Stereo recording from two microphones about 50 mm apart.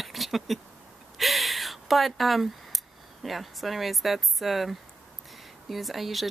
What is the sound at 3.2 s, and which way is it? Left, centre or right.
Speech, centre.